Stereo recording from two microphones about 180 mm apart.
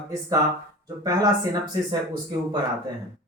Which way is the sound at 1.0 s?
20° right (ahead or behind).